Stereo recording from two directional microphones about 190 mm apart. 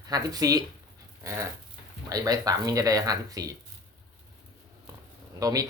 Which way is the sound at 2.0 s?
20° right (ahead or behind).